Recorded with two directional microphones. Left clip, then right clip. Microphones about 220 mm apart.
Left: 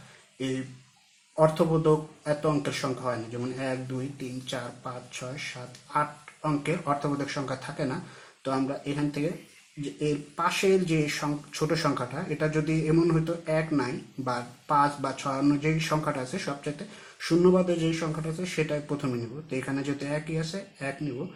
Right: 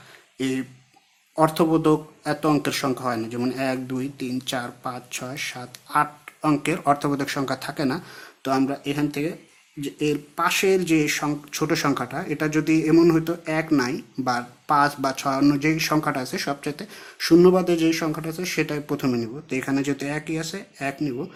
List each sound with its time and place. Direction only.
1.4 s speech: 45° right (ahead or behind)